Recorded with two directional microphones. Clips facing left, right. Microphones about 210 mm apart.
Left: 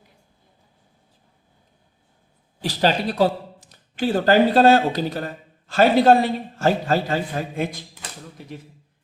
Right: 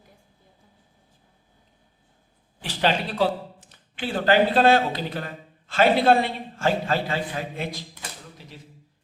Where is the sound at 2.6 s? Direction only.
40° left (ahead or behind).